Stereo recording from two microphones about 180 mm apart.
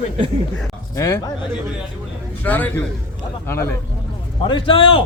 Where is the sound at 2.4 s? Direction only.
10° left (ahead or behind).